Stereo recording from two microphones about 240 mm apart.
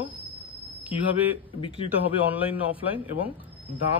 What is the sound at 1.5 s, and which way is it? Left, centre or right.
Speech, left.